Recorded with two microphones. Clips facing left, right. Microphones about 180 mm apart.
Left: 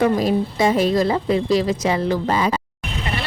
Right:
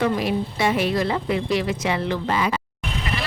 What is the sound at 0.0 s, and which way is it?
A woman's voice, 40° left (ahead or behind).